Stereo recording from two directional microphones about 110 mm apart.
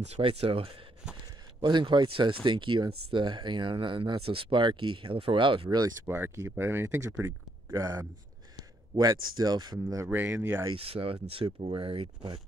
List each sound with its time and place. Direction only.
0.2 s speech: 60° right (ahead or behind)
1.6 s speech: 45° right (ahead or behind)
6.0 s speech: 20° right (ahead or behind)
7.8 s speech: 35° right (ahead or behind)
10.0 s speech: 15° right (ahead or behind)
10.7 s speech: 60° right (ahead or behind)